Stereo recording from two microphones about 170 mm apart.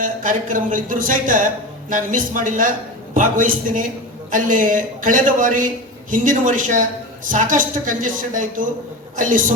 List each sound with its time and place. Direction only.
0.0 s a man's voice: 50° right (ahead or behind)